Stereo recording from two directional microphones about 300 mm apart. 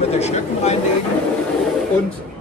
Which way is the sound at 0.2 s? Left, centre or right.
Left.